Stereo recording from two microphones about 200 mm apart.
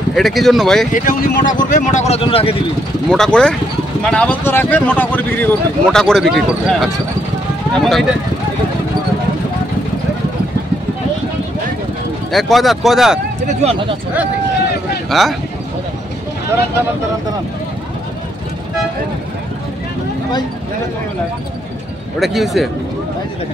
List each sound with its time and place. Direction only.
0.1 s speech: centre (ahead or behind)
0.9 s speech: 45° left (ahead or behind)
3.1 s speech: 5° left (ahead or behind)
12.3 s speech: centre (ahead or behind)
13.5 s speech: 35° right (ahead or behind)
15.0 s speech: centre (ahead or behind)
22.2 s speech: centre (ahead or behind)